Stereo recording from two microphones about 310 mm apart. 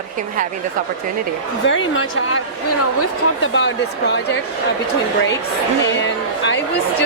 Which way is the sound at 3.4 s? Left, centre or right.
Left.